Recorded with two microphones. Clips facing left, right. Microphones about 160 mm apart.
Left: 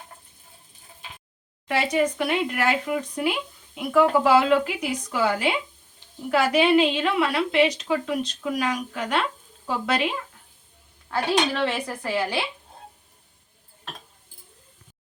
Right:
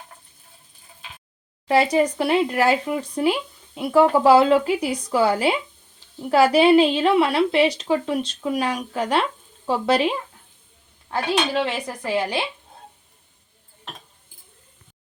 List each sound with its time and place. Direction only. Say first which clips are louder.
1.6 s a woman's voice: right 5 dB; 35° right (ahead or behind)
11.1 s a woman's voice: right 1 dB; 15° right (ahead or behind)